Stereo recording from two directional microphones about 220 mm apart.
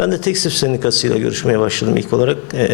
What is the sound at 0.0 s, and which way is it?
Speech, 15° left (ahead or behind).